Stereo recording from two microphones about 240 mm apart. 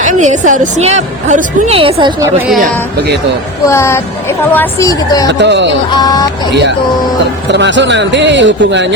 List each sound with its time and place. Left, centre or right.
0.0 s a woman's voice: right
3.7 s a woman's voice: centre
5.3 s speech: right
5.9 s a woman's voice: centre
7.5 s speech: right